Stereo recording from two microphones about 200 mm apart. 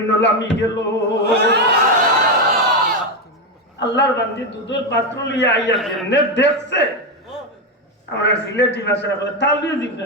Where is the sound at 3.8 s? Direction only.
60° left (ahead or behind).